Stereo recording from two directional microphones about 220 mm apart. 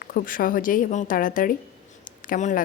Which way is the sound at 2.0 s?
40° left (ahead or behind).